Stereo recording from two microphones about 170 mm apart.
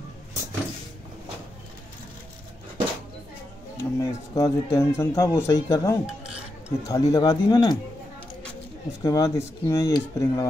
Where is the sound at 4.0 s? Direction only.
20° left (ahead or behind).